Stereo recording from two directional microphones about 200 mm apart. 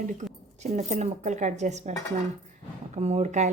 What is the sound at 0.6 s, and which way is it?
A woman's voice, 35° right (ahead or behind).